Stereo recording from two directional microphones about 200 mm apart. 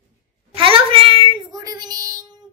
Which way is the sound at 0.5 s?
25° right (ahead or behind).